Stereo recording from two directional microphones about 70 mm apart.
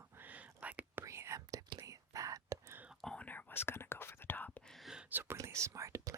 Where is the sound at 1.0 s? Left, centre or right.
Right.